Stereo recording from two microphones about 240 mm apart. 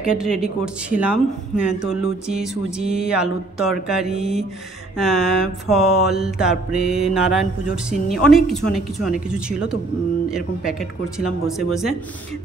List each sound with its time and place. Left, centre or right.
0.0 s speech: centre